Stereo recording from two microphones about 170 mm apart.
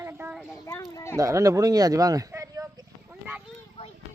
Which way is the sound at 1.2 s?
20° right (ahead or behind).